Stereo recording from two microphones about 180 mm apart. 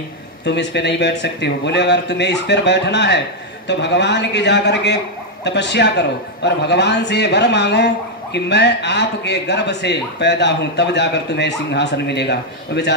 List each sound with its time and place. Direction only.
0.5 s a man's voice: 70° left (ahead or behind)